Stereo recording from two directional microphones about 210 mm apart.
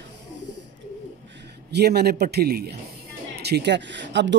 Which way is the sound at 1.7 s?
50° right (ahead or behind).